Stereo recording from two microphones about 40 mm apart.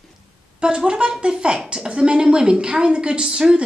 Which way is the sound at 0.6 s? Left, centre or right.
Right.